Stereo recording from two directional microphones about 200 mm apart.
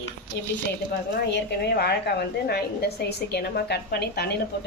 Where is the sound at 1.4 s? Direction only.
55° left (ahead or behind).